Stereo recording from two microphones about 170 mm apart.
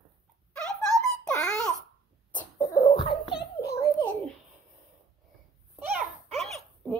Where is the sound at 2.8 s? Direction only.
35° left (ahead or behind).